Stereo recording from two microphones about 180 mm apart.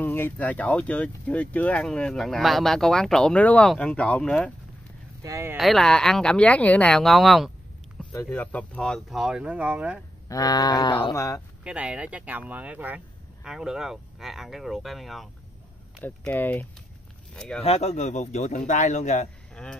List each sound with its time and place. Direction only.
0.0 s speech: 10° left (ahead or behind)
5.2 s speech: 15° right (ahead or behind)
5.6 s speech: centre (ahead or behind)
8.1 s speech: 15° left (ahead or behind); by 10.0 s 5° right (ahead or behind)
10.2 s a sound: 20° left (ahead or behind)
11.6 s speech: 5° right (ahead or behind)
17.6 s speech: 35° left (ahead or behind)
19.5 s a sound: 5° left (ahead or behind)